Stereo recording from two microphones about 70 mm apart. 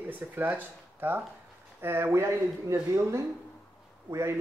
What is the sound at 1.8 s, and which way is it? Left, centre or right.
Speech, right.